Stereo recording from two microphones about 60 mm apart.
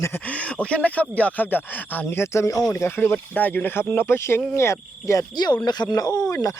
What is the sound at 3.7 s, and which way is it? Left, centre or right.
Speech, left.